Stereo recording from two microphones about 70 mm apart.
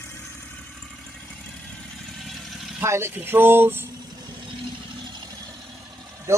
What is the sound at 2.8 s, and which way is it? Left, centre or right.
Speech, right.